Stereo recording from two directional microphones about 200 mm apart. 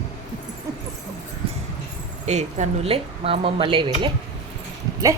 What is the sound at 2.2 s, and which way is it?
A woman's voice, 35° right (ahead or behind).